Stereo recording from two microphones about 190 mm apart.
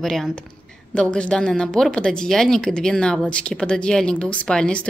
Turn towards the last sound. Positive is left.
turn(degrees=5)  # may be behind; listen again after turning